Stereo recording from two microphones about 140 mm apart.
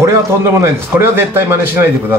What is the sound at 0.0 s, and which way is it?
A man's voice, 20° right (ahead or behind).